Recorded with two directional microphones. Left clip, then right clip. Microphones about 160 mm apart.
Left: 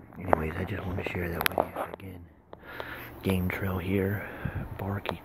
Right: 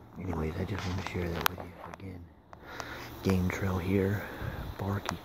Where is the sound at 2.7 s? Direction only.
Centre (ahead or behind).